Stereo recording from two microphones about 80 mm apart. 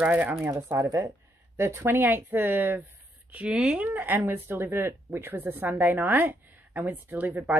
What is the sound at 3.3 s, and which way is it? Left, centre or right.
Speech, centre.